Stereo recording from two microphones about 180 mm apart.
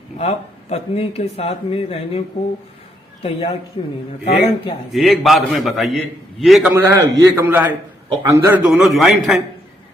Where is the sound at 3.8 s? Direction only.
30° left (ahead or behind).